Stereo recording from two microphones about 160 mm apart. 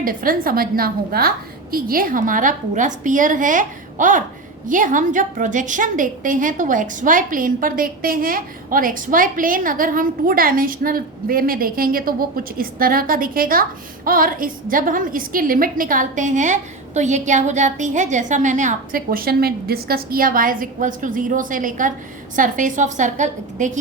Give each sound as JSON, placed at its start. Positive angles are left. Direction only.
{"t": 0.0, "sound": "a woman's voice", "side_deg": -60}